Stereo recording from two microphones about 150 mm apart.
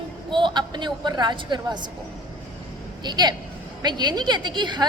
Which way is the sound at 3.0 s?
30° right (ahead or behind).